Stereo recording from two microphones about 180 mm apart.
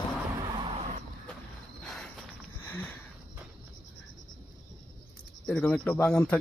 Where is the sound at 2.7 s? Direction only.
10° left (ahead or behind).